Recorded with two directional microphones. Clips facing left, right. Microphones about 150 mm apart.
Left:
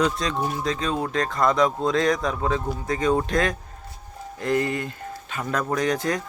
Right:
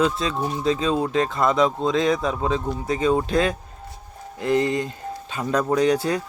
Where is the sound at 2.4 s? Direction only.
20° right (ahead or behind).